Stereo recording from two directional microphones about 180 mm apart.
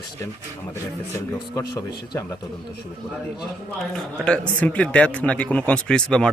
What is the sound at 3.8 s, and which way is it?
Speech, centre (ahead or behind).